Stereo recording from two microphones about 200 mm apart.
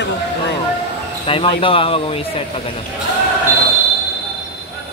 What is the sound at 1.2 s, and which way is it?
Speech, 25° left (ahead or behind).